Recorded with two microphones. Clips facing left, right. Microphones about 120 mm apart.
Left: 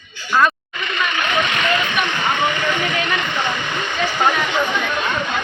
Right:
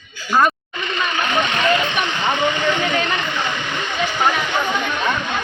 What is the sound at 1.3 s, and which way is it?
Speech, 30° right (ahead or behind).